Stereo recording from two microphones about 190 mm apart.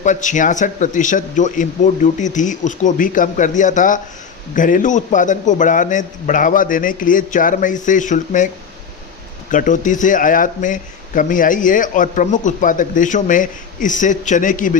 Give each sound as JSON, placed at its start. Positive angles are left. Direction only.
{"t": 0.0, "sound": "a man's voice", "side_deg": 40}
{"t": 9.5, "sound": "speech", "side_deg": 45}